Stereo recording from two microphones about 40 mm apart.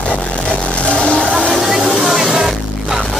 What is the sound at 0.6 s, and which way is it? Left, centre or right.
Vehicle, left.